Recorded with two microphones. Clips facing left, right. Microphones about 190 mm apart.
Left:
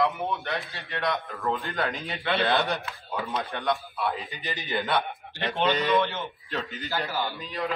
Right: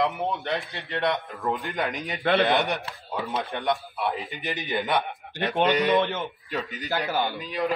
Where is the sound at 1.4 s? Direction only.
15° right (ahead or behind).